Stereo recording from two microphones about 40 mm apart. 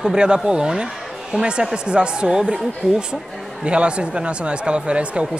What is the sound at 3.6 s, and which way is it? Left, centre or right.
Speech, right.